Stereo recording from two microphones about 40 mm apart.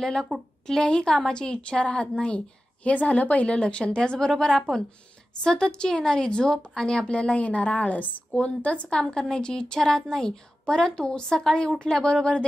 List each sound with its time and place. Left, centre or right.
0.0 s a woman's voice: centre
4.3 s a woman's voice: centre
5.4 s a woman's voice: left
9.0 s a woman's voice: centre